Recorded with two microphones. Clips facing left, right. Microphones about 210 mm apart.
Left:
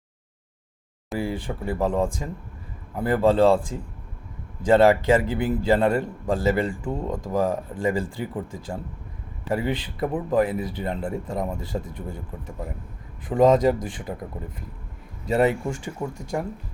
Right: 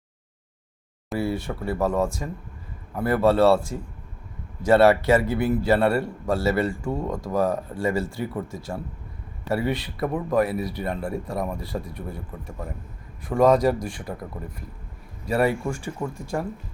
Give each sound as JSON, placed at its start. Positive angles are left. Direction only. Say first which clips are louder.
{"t": 1.2, "sound": "a man's voice", "louder": "right 2 dB", "side_deg": 15}
{"t": 4.8, "sound": "a man's voice", "louder": "even", "side_deg": 20}
{"t": 9.5, "sound": "a man's voice", "louder": "right 1 dB", "side_deg": 20}
{"t": 15.3, "sound": "a man's voice", "louder": "left 1 dB", "side_deg": 20}